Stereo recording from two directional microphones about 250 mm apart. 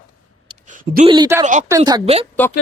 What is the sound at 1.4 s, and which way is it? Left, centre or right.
Speech, right.